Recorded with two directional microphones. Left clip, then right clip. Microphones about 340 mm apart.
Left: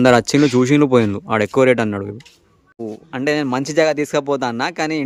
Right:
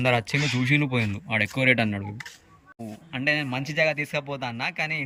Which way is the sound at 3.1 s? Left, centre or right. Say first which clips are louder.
Left 6 dB; centre.